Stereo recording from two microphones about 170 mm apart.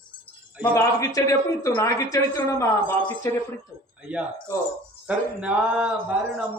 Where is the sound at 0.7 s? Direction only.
20° left (ahead or behind).